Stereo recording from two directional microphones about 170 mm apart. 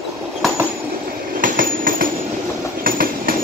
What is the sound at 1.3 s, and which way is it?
Train, 55° right (ahead or behind).